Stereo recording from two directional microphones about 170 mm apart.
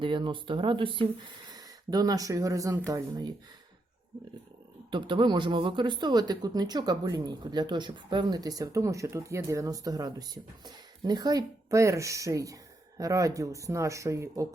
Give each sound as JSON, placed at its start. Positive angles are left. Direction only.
{"t": 0.0, "sound": "speech", "side_deg": -30}
{"t": 4.9, "sound": "speech", "side_deg": -30}